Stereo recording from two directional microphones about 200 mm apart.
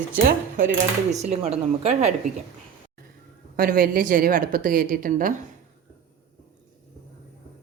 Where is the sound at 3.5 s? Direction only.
45° right (ahead or behind).